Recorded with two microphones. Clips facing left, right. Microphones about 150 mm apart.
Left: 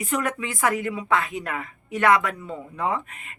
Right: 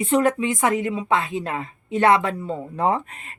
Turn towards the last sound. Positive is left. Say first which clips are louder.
# right 5 dB
turn(degrees=-35)  # may be behind; listen again after turning